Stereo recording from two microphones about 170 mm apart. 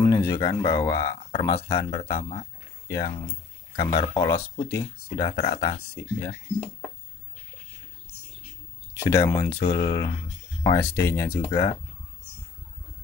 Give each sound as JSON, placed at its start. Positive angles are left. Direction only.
{"t": 0.0, "sound": "speech", "side_deg": 15}
{"t": 3.9, "sound": "speech", "side_deg": 25}
{"t": 8.9, "sound": "speech", "side_deg": 15}